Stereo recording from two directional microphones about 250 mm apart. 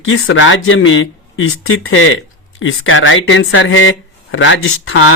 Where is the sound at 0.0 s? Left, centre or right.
Left.